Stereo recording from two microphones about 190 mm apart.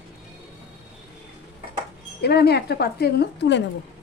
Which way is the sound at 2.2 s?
60° left (ahead or behind).